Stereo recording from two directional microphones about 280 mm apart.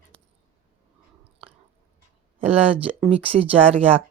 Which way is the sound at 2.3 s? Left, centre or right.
Right.